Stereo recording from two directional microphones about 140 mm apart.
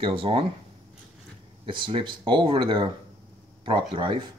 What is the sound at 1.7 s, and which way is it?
Speech, 35° right (ahead or behind).